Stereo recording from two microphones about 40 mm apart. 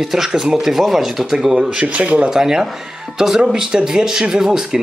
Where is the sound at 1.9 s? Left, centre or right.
Right.